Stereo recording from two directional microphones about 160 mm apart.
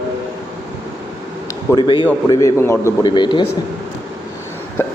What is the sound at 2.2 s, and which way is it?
Speech, 20° left (ahead or behind).